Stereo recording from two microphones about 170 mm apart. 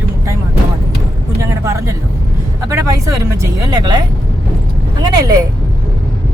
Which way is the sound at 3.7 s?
25° right (ahead or behind).